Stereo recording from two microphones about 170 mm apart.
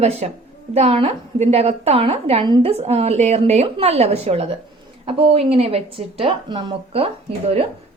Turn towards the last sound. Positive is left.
turn(degrees=-35)  # may be behind; listen again after turning